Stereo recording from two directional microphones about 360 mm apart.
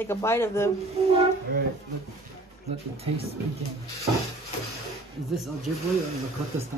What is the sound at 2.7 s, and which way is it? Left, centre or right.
Speech, centre.